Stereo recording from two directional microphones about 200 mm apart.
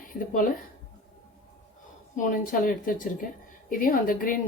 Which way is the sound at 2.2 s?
45° left (ahead or behind).